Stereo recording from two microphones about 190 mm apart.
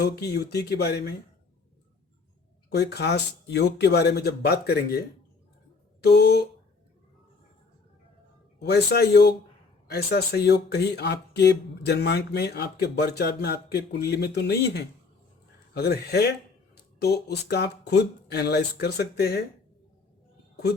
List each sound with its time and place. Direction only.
0.0 s speech: 60° left (ahead or behind)
2.6 s speech: 60° left (ahead or behind)
8.5 s speech: 60° left (ahead or behind)